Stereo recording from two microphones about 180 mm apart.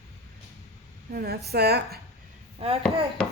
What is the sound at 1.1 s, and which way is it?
Speech, 60° right (ahead or behind).